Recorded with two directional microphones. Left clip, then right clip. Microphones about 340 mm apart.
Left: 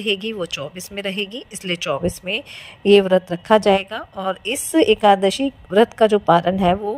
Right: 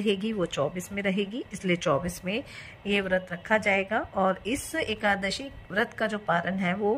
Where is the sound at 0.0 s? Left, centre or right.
Centre.